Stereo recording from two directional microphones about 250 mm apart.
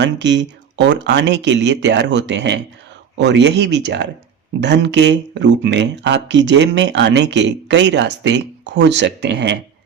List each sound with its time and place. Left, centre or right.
0.0 s speech: right